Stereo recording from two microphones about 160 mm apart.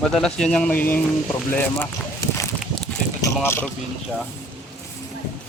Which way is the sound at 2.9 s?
10° left (ahead or behind).